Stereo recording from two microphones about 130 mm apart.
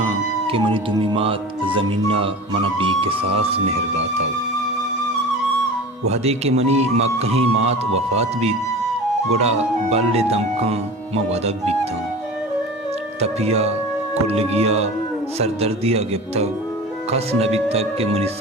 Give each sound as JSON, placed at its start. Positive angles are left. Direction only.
{"t": 0.4, "sound": "speech", "side_deg": -45}
{"t": 6.1, "sound": "speech", "side_deg": -55}
{"t": 13.1, "sound": "speech", "side_deg": -55}